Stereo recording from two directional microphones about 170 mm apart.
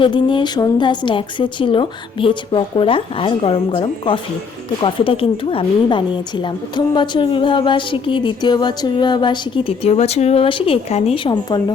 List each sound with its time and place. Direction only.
0.0 s a woman's voice: 30° left (ahead or behind)